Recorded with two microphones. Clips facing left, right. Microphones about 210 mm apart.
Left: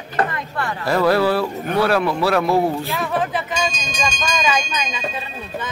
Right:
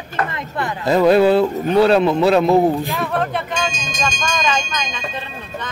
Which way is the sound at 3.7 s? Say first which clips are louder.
Right 1 dB; 35° left (ahead or behind).